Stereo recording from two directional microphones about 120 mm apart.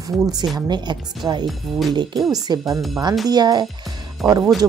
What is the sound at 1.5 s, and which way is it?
Speech, centre (ahead or behind).